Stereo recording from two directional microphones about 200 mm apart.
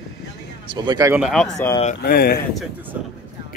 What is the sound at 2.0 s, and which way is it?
Speech, 50° left (ahead or behind).